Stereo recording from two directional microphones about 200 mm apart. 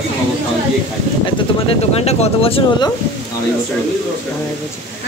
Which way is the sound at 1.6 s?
30° left (ahead or behind).